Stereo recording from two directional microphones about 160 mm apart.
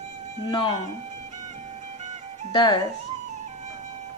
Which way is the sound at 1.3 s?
45° right (ahead or behind).